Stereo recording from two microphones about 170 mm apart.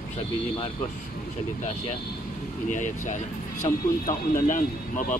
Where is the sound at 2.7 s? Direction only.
50° left (ahead or behind).